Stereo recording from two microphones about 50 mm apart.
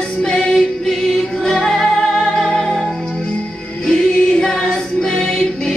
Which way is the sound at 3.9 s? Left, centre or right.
Centre.